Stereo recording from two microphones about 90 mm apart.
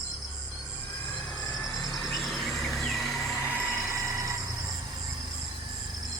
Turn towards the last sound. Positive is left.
turn(degrees=-40)  # may be behind; listen again after turning